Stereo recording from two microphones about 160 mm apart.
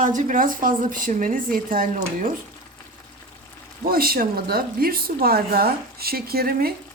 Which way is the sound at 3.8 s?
65° right (ahead or behind).